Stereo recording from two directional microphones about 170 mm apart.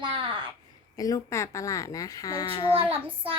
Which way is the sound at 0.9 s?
20° left (ahead or behind).